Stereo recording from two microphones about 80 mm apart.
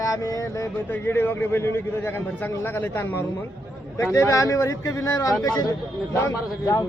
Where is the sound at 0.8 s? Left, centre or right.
Left.